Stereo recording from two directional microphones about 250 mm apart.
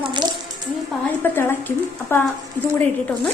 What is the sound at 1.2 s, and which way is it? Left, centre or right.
Speech, centre.